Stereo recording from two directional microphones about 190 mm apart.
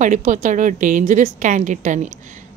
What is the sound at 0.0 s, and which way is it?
Speech, 40° right (ahead or behind).